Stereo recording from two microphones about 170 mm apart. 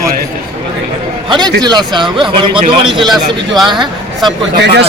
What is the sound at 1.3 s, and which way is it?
Speech, 25° right (ahead or behind).